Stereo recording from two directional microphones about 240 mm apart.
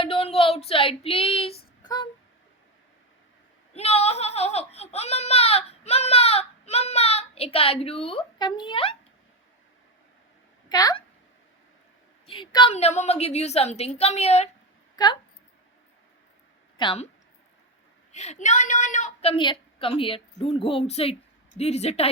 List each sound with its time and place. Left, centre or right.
0.0 s speech: left
1.8 s a sound: centre
3.8 s speech: left
10.7 s speech: centre
12.2 s a woman's voice: left
16.7 s a woman's voice: left
18.1 s a woman's voice: left